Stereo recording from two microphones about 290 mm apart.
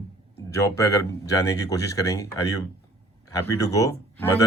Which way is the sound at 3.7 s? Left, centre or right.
Centre.